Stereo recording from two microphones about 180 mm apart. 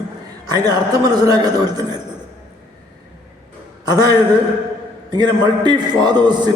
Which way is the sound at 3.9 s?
20° right (ahead or behind).